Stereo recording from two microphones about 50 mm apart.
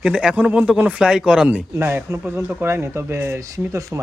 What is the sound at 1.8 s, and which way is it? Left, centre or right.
Speech, right.